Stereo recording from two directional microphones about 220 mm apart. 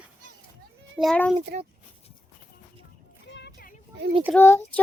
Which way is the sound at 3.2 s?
50° left (ahead or behind).